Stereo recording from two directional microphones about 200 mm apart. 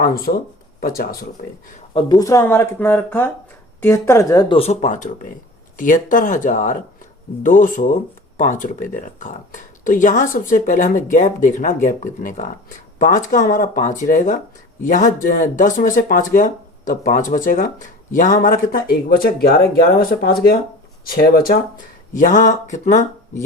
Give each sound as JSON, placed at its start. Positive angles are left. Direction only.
{"t": 0.0, "sound": "speech", "side_deg": 50}
{"t": 1.9, "sound": "speech", "side_deg": 25}